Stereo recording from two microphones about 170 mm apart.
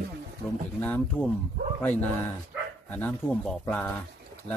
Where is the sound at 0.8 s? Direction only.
10° left (ahead or behind).